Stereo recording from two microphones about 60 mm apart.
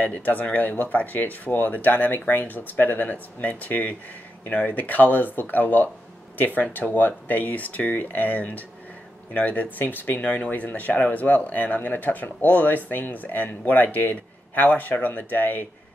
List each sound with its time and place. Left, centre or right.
0.0 s speech: left